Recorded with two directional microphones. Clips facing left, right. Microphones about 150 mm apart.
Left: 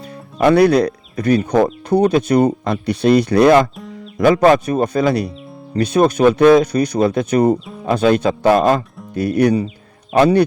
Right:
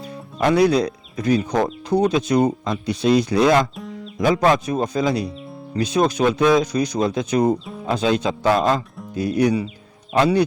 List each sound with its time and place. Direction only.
0.3 s speech: 65° left (ahead or behind)